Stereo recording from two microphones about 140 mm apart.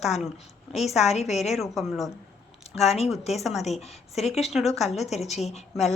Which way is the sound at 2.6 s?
50° left (ahead or behind).